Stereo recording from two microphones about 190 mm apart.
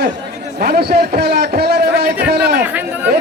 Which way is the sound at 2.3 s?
55° right (ahead or behind).